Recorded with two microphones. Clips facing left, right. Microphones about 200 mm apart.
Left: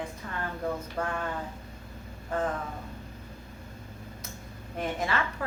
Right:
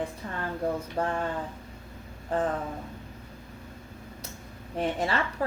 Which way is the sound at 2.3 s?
30° right (ahead or behind).